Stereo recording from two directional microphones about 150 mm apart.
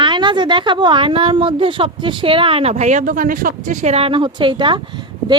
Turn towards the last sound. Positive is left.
turn(degrees=-30)  # may be behind; listen again after turning